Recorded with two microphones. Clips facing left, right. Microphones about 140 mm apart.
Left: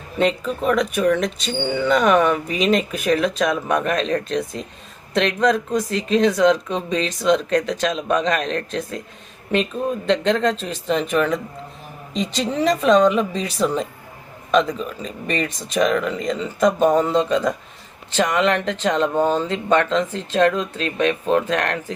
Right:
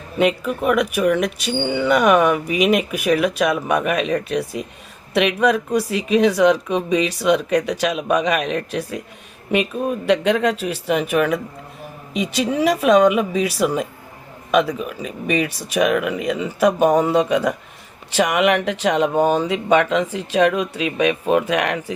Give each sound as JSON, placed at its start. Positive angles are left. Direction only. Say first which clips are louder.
{"t": 0.2, "sound": "speech", "louder": "right 2 dB", "side_deg": -10}